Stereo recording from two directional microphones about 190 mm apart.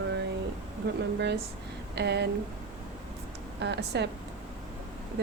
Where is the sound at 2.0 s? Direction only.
60° right (ahead or behind).